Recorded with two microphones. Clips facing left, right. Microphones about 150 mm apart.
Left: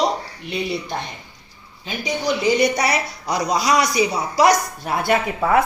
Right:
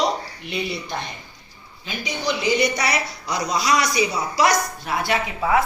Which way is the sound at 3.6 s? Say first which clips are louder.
Left 1 dB; 45° left (ahead or behind).